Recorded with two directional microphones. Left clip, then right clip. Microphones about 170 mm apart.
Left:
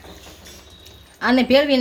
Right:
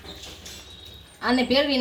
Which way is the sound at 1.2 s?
50° left (ahead or behind).